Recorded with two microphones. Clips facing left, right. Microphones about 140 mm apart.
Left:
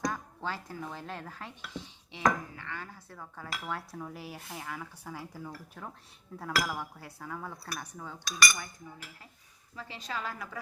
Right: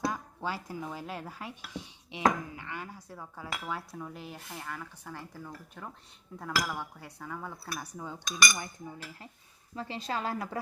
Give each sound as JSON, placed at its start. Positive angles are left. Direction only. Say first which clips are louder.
{"t": 0.0, "sound": "speech", "louder": "right 1 dB", "side_deg": -10}
{"t": 7.8, "sound": "cutlery", "louder": "right 2 dB", "side_deg": -10}
{"t": 8.3, "sound": "a woman's voice", "louder": "even", "side_deg": -20}
{"t": 9.7, "sound": "a woman's voice", "louder": "right 4 dB", "side_deg": -30}